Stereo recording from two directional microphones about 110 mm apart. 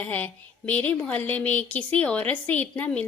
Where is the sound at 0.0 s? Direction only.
15° left (ahead or behind).